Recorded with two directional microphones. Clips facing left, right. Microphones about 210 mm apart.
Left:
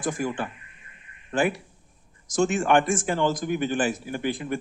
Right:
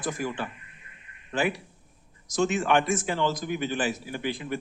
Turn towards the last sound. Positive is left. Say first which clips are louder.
# left 3 dB
turn(degrees=50)  # may be behind; listen again after turning